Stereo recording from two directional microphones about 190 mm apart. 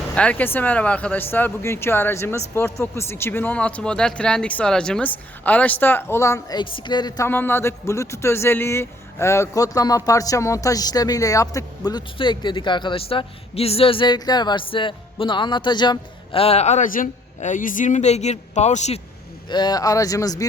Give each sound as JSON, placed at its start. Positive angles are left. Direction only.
{"t": 0.1, "sound": "speech", "side_deg": 5}
{"t": 7.3, "sound": "a man's voice", "side_deg": 10}
{"t": 19.5, "sound": "a man's voice", "side_deg": 20}